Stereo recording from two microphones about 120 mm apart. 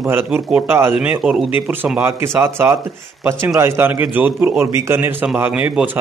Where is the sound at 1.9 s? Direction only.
20° right (ahead or behind).